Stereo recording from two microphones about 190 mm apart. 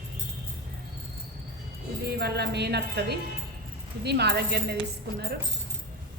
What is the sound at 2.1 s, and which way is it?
A woman's voice, 60° right (ahead or behind).